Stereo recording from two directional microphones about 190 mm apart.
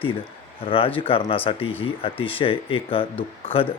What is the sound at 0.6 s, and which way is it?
Speech, 30° left (ahead or behind).